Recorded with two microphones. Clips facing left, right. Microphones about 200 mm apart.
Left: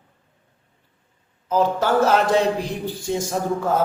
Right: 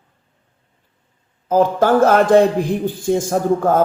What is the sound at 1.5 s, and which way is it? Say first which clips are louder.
A man's voice: right 5 dB; 50° right (ahead or behind).